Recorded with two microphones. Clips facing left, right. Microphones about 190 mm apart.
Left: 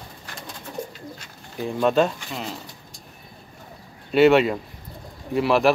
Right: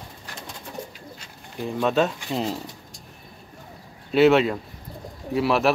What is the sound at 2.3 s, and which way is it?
Speech, 30° right (ahead or behind).